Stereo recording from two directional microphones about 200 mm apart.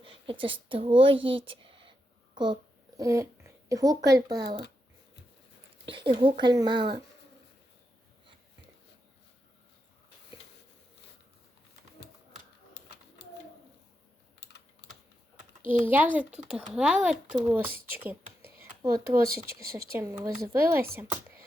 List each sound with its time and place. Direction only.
0.0 s a sound: 25° right (ahead or behind)
3.0 s speech: 15° right (ahead or behind)
5.9 s speech: 25° right (ahead or behind)
14.4 s computer keyboard: 55° left (ahead or behind)
15.9 s speech: 10° right (ahead or behind)
17.8 s a sound: 10° right (ahead or behind)
19.9 s speech: 15° right (ahead or behind)